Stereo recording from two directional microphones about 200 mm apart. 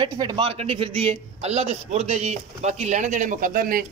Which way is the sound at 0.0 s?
20° right (ahead or behind).